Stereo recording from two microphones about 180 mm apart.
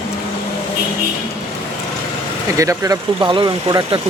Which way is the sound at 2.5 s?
20° right (ahead or behind).